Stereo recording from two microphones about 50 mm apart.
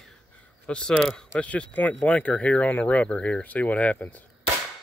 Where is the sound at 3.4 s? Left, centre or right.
Left.